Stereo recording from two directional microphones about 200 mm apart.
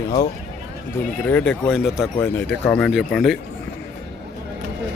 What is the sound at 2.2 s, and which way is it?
Speech, 10° left (ahead or behind).